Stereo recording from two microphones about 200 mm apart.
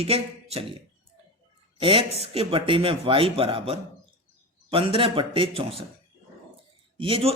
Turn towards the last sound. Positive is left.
turn(degrees=-25)  # may be behind; listen again after turning